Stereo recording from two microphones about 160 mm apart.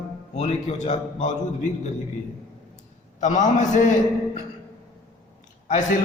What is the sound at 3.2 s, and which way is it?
Speech, 50° left (ahead or behind).